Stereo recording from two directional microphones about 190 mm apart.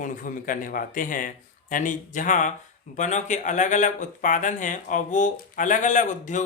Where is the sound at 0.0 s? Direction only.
45° left (ahead or behind).